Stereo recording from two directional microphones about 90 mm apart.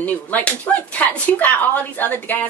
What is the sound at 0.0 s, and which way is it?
A woman's voice, 15° left (ahead or behind).